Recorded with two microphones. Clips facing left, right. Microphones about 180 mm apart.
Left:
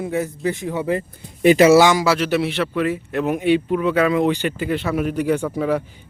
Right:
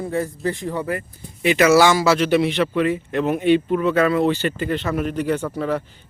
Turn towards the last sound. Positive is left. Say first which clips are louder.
# left 2 dB
turn(degrees=10)  # may be behind; listen again after turning